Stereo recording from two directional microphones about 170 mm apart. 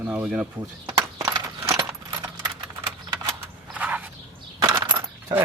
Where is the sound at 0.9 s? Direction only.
20° right (ahead or behind).